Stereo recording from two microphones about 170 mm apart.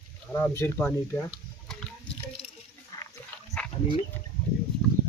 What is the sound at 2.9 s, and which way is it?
Pig, 20° left (ahead or behind).